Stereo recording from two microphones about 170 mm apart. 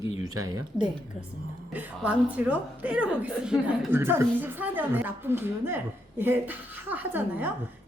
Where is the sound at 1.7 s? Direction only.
10° right (ahead or behind).